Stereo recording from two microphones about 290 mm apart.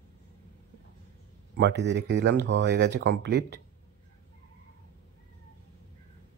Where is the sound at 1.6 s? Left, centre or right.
Right.